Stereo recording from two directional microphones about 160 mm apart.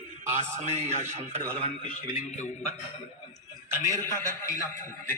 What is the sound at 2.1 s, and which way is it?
Speech, 40° left (ahead or behind).